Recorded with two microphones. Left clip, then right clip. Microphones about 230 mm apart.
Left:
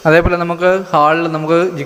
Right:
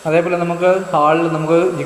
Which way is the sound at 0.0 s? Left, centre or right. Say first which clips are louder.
Left 4 dB; left.